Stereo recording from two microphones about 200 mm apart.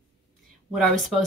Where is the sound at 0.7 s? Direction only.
Centre (ahead or behind).